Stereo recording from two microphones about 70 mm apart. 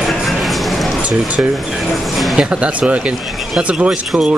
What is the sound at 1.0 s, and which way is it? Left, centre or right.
Speech, centre.